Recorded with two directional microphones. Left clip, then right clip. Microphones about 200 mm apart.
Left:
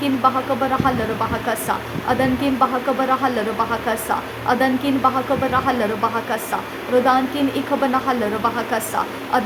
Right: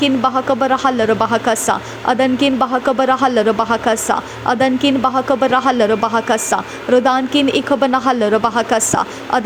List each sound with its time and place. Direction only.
0.0 s speech: 35° right (ahead or behind)